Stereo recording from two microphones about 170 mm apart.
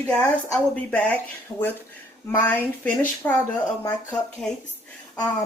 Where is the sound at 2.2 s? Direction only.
10° left (ahead or behind).